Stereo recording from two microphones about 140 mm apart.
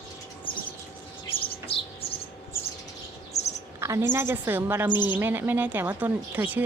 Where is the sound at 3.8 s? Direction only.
20° right (ahead or behind).